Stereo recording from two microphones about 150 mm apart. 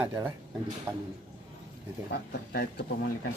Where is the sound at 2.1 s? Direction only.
90° left.